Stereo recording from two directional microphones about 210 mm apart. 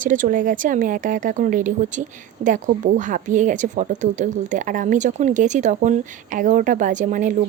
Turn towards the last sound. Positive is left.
turn(degrees=-35)  # may be behind; listen again after turning